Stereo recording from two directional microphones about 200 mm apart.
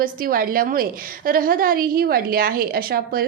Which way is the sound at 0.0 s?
45° right (ahead or behind).